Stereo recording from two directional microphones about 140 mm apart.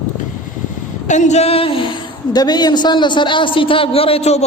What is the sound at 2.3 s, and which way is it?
A man's voice, 30° left (ahead or behind).